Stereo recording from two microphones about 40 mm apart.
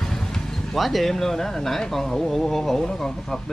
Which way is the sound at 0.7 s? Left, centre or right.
Centre.